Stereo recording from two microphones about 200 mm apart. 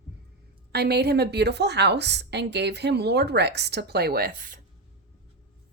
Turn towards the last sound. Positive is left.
turn(degrees=-45)  # may be behind; listen again after turning